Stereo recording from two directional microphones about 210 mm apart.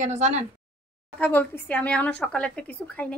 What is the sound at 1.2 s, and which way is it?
A woman's voice, 10° left (ahead or behind).